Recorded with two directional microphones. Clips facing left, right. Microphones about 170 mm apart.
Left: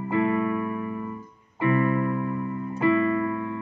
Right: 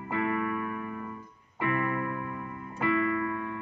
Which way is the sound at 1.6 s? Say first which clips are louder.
Left 7 dB; 30° left (ahead or behind).